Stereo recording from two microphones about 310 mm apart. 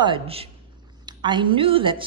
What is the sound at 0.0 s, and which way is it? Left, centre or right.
Speech, centre.